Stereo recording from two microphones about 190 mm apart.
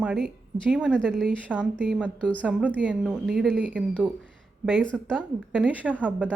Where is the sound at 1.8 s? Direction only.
5° right (ahead or behind).